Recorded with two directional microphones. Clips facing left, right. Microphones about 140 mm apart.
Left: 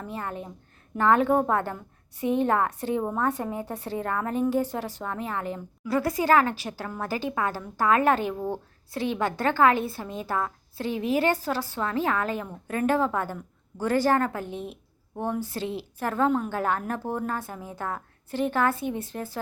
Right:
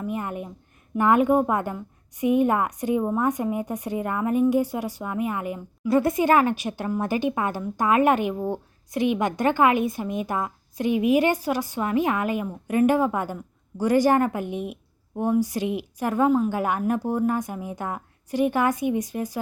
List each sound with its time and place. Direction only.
0.0 s a woman's voice: 15° right (ahead or behind)
5.9 s a woman's voice: 20° right (ahead or behind)